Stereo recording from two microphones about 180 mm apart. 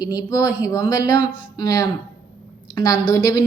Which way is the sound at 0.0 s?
20° left (ahead or behind).